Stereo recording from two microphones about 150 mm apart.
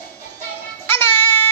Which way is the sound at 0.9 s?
15° left (ahead or behind).